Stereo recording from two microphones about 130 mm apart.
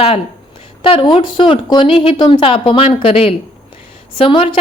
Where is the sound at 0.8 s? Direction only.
40° left (ahead or behind).